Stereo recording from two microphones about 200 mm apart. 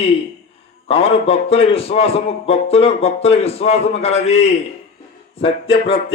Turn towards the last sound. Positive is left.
turn(degrees=25)  # may be behind; listen again after turning